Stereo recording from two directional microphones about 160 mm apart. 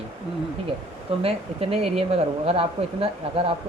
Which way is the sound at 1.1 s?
35° right (ahead or behind).